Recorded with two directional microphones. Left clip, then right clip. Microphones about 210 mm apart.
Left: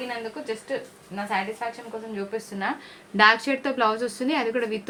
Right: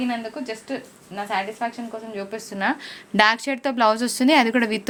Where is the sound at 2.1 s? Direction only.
50° right (ahead or behind).